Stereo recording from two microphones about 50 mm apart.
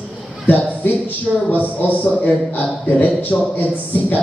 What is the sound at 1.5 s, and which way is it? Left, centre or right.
Speech, left.